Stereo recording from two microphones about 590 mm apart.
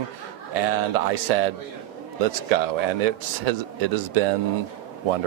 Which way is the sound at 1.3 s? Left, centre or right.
Right.